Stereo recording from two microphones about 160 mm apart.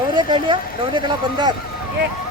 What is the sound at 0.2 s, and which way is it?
Speech, 30° right (ahead or behind).